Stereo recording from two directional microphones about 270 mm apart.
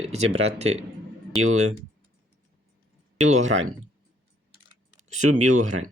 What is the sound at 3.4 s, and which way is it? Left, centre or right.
Speech, right.